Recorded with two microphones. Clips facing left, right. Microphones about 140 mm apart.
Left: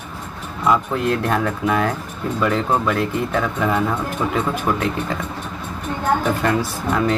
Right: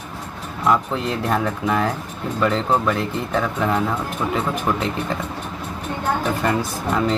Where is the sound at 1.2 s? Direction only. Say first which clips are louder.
Left 1 dB; 5° right (ahead or behind).